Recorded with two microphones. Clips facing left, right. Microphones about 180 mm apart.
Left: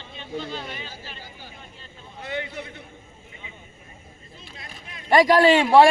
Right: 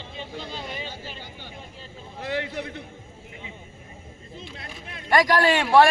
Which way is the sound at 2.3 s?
70° right (ahead or behind).